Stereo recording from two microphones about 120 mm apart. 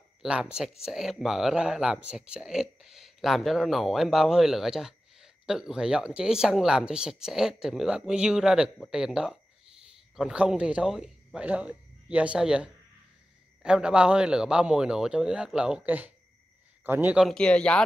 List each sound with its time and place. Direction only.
0.2 s speech: 5° right (ahead or behind)
17.2 s speech: 5° left (ahead or behind)